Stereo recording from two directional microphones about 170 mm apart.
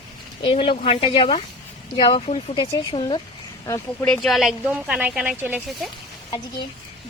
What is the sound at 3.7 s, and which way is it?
A woman's voice, 10° left (ahead or behind).